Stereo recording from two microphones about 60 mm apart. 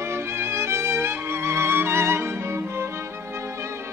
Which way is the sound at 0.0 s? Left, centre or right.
Right.